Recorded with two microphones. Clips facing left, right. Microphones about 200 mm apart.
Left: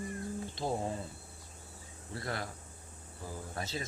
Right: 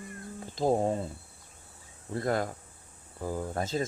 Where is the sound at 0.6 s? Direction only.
50° right (ahead or behind).